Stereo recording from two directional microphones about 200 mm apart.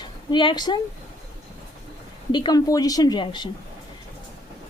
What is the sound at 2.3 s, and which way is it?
Speech, 20° left (ahead or behind).